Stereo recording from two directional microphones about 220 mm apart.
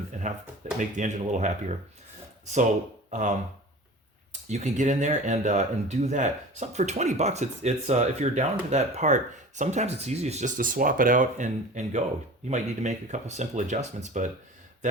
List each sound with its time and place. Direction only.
0.1 s a sound: 30° right (ahead or behind)
0.8 s speech: 35° right (ahead or behind)
3.1 s speech: 35° right (ahead or behind)